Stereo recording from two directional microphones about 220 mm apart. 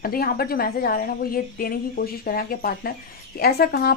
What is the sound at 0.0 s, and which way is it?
A woman's voice, 40° left (ahead or behind).